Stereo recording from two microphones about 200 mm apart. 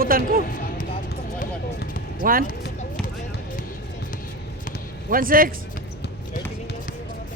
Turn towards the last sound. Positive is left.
turn(degrees=-45)  # may be behind; listen again after turning